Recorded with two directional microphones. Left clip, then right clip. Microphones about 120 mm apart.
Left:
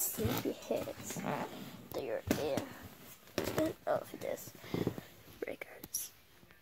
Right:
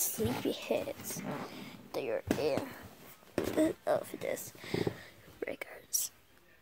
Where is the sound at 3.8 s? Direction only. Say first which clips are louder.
Right 3 dB; 60° right (ahead or behind).